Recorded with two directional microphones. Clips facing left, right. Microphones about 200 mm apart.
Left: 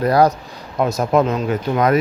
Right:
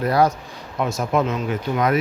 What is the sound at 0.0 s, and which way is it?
Speech, 40° left (ahead or behind).